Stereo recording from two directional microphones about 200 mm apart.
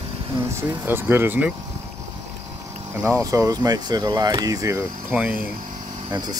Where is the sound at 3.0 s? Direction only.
15° right (ahead or behind).